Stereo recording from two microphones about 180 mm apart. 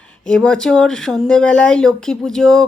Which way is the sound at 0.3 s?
5° left (ahead or behind).